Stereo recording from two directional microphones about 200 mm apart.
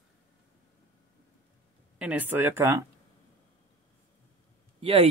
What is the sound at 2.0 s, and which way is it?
Speech, 10° right (ahead or behind).